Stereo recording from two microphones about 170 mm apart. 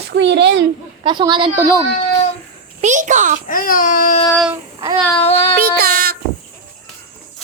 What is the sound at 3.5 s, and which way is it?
Baby cry, 55° left (ahead or behind).